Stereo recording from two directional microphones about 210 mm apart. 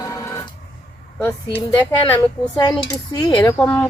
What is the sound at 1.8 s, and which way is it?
Speech, 10° left (ahead or behind).